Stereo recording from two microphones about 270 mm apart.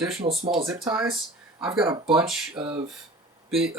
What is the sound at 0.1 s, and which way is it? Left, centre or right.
Speech, right.